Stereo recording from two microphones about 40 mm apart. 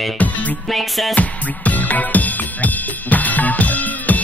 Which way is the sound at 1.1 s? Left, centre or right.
Left.